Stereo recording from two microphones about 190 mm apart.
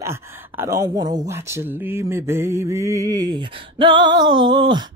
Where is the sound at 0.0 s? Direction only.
15° right (ahead or behind).